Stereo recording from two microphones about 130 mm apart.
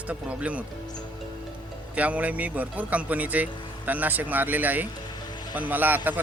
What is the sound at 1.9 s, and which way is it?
Speech, 10° right (ahead or behind).